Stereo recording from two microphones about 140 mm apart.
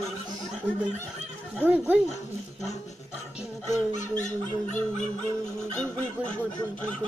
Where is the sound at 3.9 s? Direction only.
60° left (ahead or behind).